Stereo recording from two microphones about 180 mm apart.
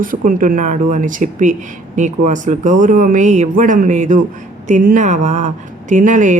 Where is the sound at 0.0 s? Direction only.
50° right (ahead or behind).